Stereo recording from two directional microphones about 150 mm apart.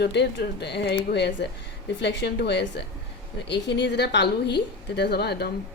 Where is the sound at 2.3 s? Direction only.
90° left.